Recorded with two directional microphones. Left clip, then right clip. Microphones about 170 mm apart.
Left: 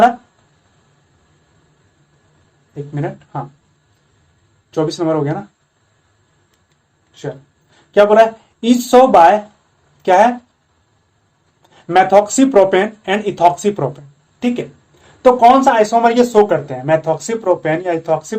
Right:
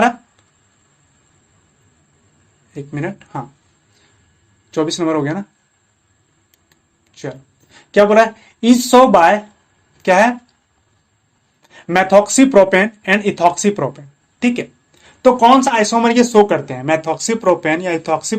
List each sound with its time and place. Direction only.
2.9 s speech: 40° right (ahead or behind)
4.7 s speech: 30° right (ahead or behind)
7.1 s speech: 40° right (ahead or behind)
11.9 s speech: 25° right (ahead or behind); by 18.3 s 45° right (ahead or behind)